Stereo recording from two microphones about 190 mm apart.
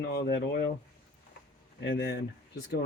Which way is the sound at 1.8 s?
55° left (ahead or behind).